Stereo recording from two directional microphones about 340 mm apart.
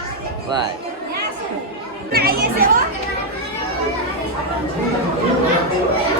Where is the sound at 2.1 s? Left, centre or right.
Right.